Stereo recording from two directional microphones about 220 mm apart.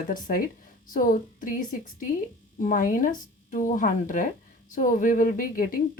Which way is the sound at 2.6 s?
35° left (ahead or behind).